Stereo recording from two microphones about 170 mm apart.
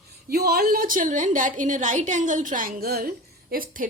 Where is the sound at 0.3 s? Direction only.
65° right (ahead or behind).